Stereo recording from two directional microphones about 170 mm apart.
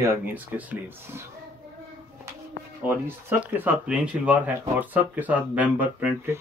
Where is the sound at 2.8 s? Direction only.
10° right (ahead or behind).